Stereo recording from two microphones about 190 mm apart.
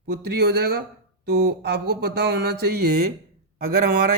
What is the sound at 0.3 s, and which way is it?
Speech, 60° right (ahead or behind).